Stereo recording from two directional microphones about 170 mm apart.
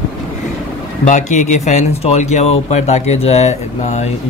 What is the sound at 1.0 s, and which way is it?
Speech, 45° left (ahead or behind).